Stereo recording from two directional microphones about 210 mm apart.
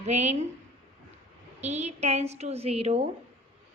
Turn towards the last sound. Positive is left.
turn(degrees=-25)  # may be behind; listen again after turning